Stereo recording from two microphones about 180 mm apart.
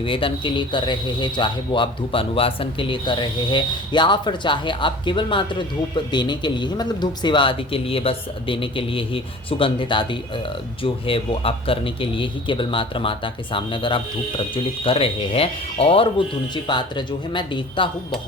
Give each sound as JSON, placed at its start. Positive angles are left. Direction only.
{"t": 0.0, "sound": "speech", "side_deg": 30}